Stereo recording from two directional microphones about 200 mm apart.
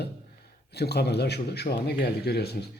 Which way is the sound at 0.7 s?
55° left (ahead or behind).